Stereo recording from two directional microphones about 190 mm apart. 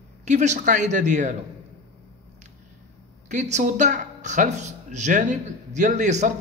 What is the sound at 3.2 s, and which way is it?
Speech, 40° right (ahead or behind).